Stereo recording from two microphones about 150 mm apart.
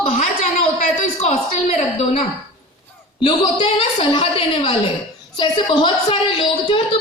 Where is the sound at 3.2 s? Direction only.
30° left (ahead or behind).